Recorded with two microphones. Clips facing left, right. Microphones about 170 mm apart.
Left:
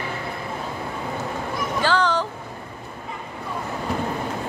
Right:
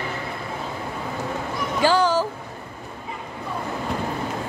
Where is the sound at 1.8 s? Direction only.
10° right (ahead or behind).